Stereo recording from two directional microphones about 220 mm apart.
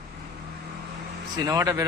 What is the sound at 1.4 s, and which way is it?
Speech, 15° right (ahead or behind).